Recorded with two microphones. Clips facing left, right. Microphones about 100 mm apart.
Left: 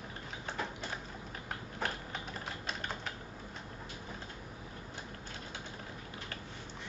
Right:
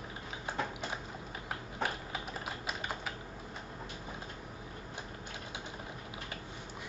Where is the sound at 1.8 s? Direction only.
5° right (ahead or behind).